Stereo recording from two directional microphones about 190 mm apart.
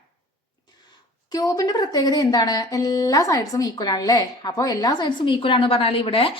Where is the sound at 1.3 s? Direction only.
20° left (ahead or behind).